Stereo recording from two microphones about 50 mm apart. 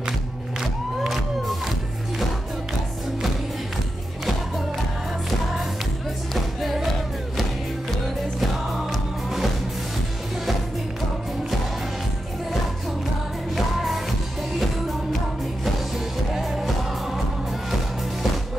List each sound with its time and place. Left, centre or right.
0.6 s music: centre
6.3 s music: centre
16.3 s music: centre